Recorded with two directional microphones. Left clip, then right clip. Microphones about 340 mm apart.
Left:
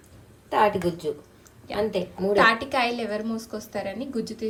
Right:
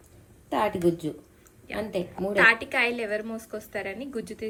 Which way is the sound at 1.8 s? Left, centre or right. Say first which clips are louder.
Left 4 dB; centre.